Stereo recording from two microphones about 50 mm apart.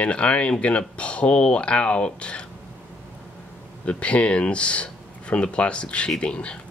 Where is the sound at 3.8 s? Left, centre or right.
Left.